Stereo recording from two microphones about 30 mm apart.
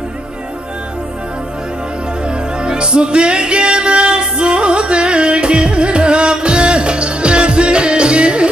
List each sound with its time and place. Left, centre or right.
2.2 s music: right